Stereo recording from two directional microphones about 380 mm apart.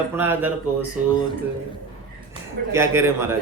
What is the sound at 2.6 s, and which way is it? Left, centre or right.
Speech, right.